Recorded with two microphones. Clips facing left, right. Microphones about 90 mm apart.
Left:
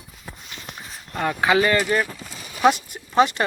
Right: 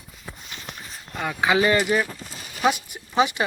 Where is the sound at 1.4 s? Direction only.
20° right (ahead or behind).